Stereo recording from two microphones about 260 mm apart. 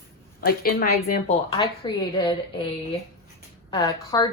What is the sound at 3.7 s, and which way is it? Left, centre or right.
Speech, centre.